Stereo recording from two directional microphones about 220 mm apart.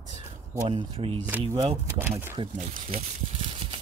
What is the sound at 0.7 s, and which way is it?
Speech, 20° right (ahead or behind).